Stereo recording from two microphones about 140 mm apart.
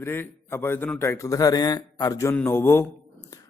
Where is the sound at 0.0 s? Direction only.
15° left (ahead or behind).